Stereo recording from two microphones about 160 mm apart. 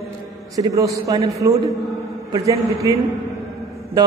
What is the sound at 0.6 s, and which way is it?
A woman's voice, 20° right (ahead or behind).